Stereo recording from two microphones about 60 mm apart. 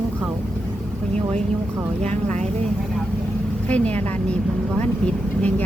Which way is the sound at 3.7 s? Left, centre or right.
Left.